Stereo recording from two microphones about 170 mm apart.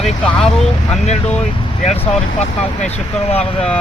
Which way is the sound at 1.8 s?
40° left (ahead or behind).